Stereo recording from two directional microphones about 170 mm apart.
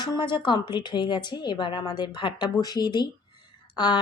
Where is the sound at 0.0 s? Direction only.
25° left (ahead or behind).